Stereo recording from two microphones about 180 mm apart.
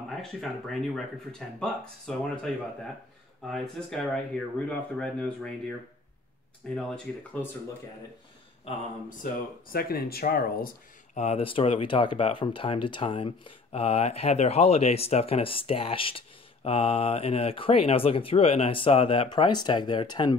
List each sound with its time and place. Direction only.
0.1 s speech: centre (ahead or behind)
9.2 s speech: 55° left (ahead or behind)
11.1 s speech: 35° left (ahead or behind)